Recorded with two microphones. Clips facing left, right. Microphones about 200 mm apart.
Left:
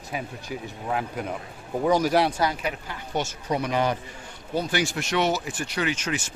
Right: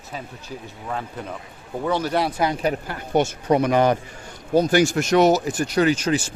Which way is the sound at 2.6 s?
45° right (ahead or behind).